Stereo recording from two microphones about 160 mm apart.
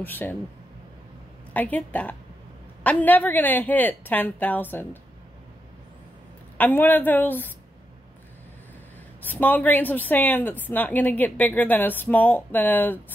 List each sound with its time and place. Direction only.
0.0 s speech: 10° left (ahead or behind)
1.5 s speech: 10° left (ahead or behind)
6.6 s speech: 10° left (ahead or behind)
9.2 s speech: 10° left (ahead or behind)